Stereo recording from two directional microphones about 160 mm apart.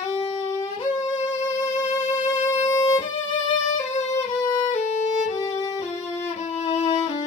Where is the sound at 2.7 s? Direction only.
20° left (ahead or behind).